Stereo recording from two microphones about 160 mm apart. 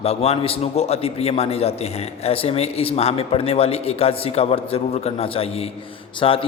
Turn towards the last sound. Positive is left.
turn(degrees=35)  # may be behind; listen again after turning